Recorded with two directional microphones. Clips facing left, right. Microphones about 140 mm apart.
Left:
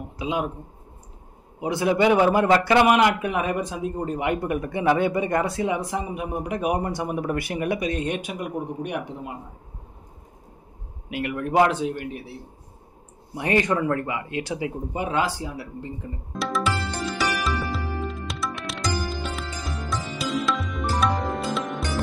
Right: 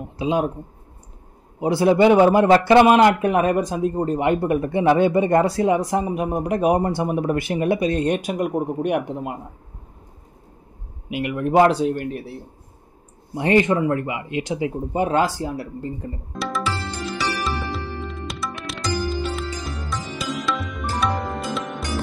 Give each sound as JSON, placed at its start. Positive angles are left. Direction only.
{"t": 0.2, "sound": "speech", "side_deg": -35}
{"t": 1.6, "sound": "a man's voice", "side_deg": -35}
{"t": 3.2, "sound": "speech", "side_deg": -45}
{"t": 11.1, "sound": "a man's voice", "side_deg": -20}
{"t": 11.9, "sound": "speech", "side_deg": -45}
{"t": 13.3, "sound": "a man's voice", "side_deg": -25}
{"t": 15.0, "sound": "speech", "side_deg": -45}
{"t": 16.3, "sound": "music", "side_deg": 0}